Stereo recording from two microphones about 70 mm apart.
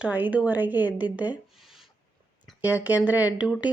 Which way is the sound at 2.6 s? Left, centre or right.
Right.